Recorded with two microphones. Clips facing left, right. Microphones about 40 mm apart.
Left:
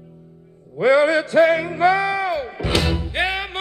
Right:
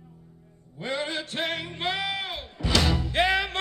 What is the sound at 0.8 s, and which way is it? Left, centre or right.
Music, left.